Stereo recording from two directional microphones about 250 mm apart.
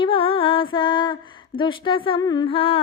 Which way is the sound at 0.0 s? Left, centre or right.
Left.